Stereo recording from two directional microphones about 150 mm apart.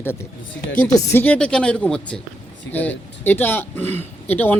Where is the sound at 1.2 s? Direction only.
10° left (ahead or behind).